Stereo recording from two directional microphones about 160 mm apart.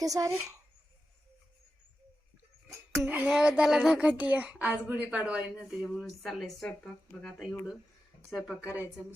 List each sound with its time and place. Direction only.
0.0 s speech: 20° right (ahead or behind)
3.1 s speech: 10° right (ahead or behind)